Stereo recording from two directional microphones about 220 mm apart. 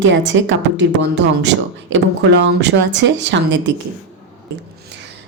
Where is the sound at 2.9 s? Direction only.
55° right (ahead or behind).